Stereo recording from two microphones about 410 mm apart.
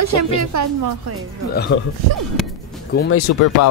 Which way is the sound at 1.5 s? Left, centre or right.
Left.